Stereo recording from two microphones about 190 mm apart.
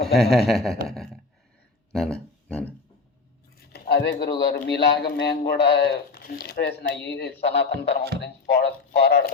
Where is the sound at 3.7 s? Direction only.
60° left (ahead or behind).